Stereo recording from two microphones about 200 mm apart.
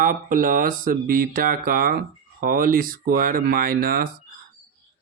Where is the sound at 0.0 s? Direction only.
40° right (ahead or behind).